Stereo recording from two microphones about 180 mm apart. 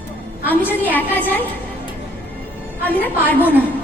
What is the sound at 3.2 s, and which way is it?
Speech, 10° left (ahead or behind).